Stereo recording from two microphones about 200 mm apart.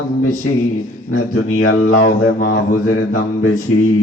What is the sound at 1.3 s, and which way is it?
Mantra, 70° left (ahead or behind).